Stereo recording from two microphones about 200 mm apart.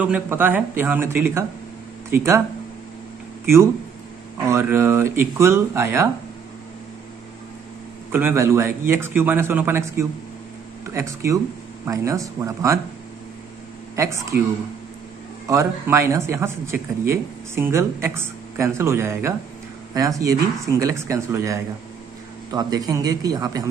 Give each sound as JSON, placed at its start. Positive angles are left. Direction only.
{"t": 0.0, "sound": "speech", "side_deg": -10}
{"t": 4.5, "sound": "speech", "side_deg": -10}
{"t": 8.1, "sound": "speech", "side_deg": -10}
{"t": 13.9, "sound": "speech", "side_deg": -15}
{"t": 15.4, "sound": "speech", "side_deg": -15}